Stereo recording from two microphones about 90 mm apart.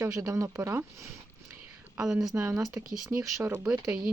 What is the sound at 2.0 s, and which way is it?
Speech, 5° right (ahead or behind).